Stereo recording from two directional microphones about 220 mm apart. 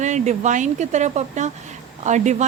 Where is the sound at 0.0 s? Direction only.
35° right (ahead or behind).